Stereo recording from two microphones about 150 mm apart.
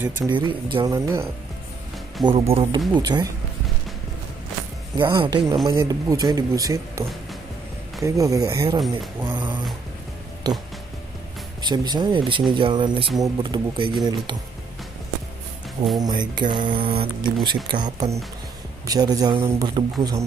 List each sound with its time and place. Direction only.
0.3 s speech: 35° right (ahead or behind)
0.9 s speech: 20° right (ahead or behind)
2.2 s speech: 40° right (ahead or behind)
2.9 s speech: 25° right (ahead or behind)
4.9 s speech: 30° right (ahead or behind)
11.6 s speech: 30° right (ahead or behind)
16.0 s speech: 30° right (ahead or behind)